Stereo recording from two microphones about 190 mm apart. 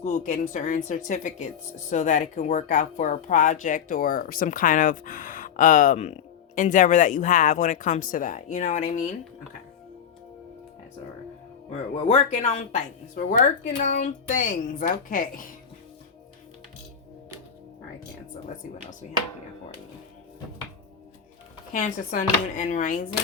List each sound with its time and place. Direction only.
0.0 s speech: 40° left (ahead or behind)
11.9 s speech: 35° left (ahead or behind)
21.7 s speech: 45° left (ahead or behind)